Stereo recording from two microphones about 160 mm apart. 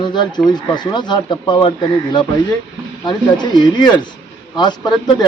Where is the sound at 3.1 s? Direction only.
25° left (ahead or behind).